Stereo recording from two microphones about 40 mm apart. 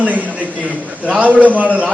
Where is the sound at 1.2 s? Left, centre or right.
Right.